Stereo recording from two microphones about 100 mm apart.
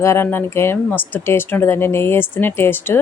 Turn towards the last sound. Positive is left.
turn(degrees=20)  # may be behind; listen again after turning